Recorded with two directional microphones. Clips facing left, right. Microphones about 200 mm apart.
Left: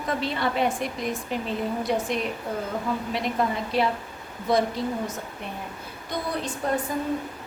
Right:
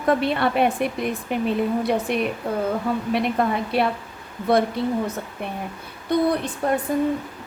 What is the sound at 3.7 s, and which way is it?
Speech, 60° right (ahead or behind).